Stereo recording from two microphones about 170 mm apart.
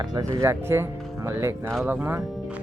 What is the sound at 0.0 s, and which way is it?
Speech, 25° right (ahead or behind).